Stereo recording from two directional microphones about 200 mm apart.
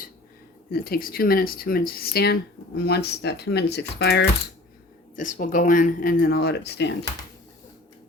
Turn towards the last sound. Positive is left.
turn(degrees=55)  # may be behind; listen again after turning